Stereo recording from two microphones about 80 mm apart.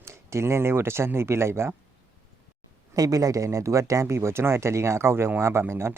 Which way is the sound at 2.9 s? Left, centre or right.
Right.